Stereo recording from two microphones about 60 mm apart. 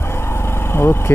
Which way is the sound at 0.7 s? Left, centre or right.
Left.